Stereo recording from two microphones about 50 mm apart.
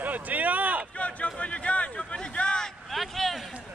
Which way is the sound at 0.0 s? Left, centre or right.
Right.